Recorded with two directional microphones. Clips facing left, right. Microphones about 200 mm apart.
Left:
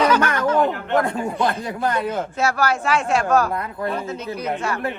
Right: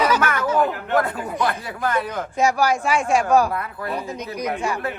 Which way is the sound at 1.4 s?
20° left (ahead or behind).